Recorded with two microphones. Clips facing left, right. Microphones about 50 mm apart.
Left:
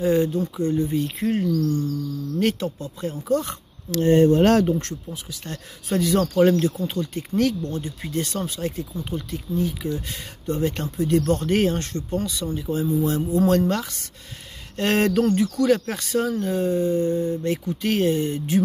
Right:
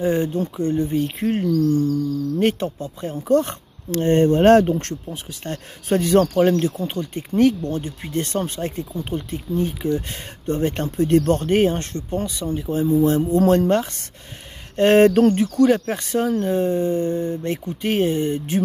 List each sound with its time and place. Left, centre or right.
0.0 s speech: right
6.9 s speech: right
11.5 s speech: right
17.4 s speech: right